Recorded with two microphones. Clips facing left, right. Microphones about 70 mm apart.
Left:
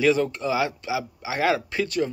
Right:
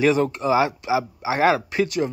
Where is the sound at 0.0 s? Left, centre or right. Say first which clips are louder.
Right 2 dB; right.